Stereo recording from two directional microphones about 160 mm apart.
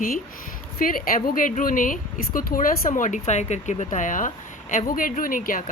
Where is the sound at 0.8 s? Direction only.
60° left (ahead or behind).